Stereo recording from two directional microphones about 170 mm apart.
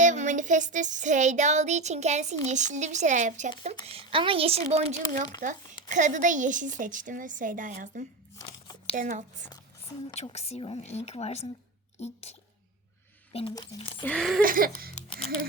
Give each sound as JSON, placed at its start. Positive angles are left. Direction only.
{"t": 0.0, "sound": "a sound", "side_deg": -45}
{"t": 3.8, "sound": "speech", "side_deg": -30}
{"t": 5.4, "sound": "a sound", "side_deg": -50}
{"t": 10.2, "sound": "speech", "side_deg": 40}
{"t": 13.3, "sound": "speech", "side_deg": 25}
{"t": 14.0, "sound": "speech", "side_deg": 5}
{"t": 14.4, "sound": "music", "side_deg": -55}